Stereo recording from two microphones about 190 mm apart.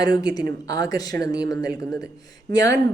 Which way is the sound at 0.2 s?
20° left (ahead or behind).